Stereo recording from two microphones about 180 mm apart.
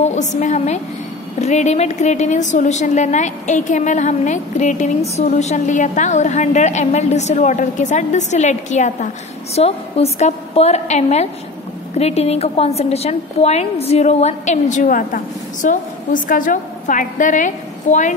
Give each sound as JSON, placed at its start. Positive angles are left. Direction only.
{"t": 0.0, "sound": "a woman's voice", "side_deg": 40}